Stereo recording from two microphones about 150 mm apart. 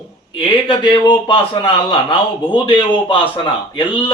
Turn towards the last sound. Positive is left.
turn(degrees=35)  # may be behind; listen again after turning